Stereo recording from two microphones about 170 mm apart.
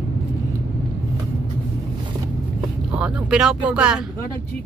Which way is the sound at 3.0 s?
5° right (ahead or behind).